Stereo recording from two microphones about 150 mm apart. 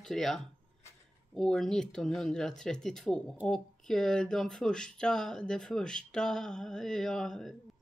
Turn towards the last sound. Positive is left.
turn(degrees=5)  # may be behind; listen again after turning